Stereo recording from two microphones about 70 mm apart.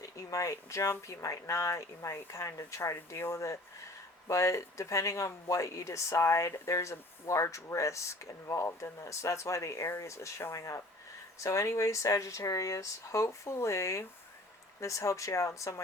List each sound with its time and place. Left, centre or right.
0.0 s speech: left